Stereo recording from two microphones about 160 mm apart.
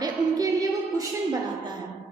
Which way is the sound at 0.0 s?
25° right (ahead or behind).